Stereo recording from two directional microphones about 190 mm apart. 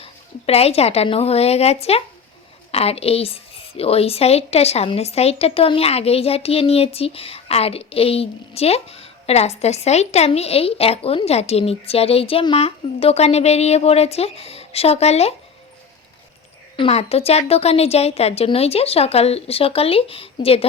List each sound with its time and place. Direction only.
0.0 s a woman's voice: 30° left (ahead or behind)
16.7 s a woman's voice: 30° left (ahead or behind)